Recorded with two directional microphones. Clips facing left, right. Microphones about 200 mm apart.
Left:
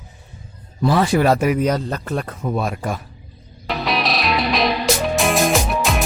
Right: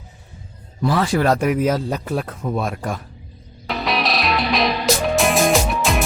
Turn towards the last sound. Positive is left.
turn(degrees=0)  # may be behind; listen again after turning